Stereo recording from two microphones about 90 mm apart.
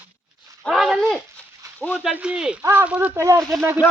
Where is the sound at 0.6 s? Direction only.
5° right (ahead or behind).